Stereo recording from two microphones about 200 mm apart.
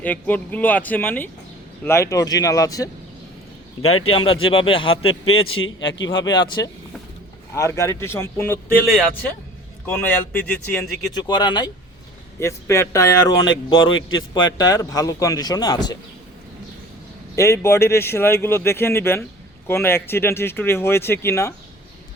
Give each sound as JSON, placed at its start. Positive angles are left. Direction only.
{"t": 0.0, "sound": "a man's voice", "side_deg": 10}
{"t": 3.8, "sound": "a man's voice", "side_deg": 90}
{"t": 4.1, "sound": "speech", "side_deg": 25}
{"t": 5.0, "sound": "a man's voice", "side_deg": 90}
{"t": 6.2, "sound": "a man's voice", "side_deg": 20}
{"t": 9.8, "sound": "a man's voice", "side_deg": 10}
{"t": 11.1, "sound": "a man's voice", "side_deg": 20}
{"t": 17.3, "sound": "a man's voice", "side_deg": 15}